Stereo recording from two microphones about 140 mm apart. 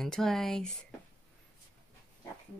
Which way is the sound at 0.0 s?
5° left (ahead or behind).